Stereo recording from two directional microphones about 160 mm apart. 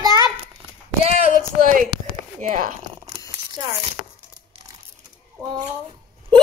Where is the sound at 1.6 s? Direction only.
60° right (ahead or behind).